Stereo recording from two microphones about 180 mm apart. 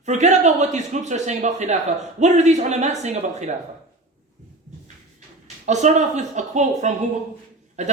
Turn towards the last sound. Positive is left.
turn(degrees=-40)  # may be behind; listen again after turning